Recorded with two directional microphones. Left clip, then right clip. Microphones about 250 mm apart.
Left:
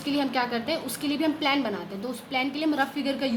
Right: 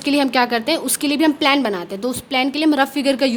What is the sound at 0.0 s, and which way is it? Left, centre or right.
Speech, right.